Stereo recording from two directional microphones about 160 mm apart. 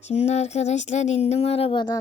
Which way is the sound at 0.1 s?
45° left (ahead or behind).